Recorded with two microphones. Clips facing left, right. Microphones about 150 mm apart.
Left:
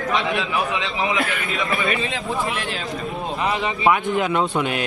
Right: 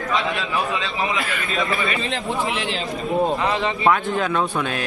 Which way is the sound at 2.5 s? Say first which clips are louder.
Right 2 dB; 50° left (ahead or behind).